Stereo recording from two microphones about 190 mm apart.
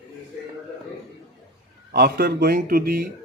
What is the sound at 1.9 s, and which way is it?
Speech, 55° right (ahead or behind).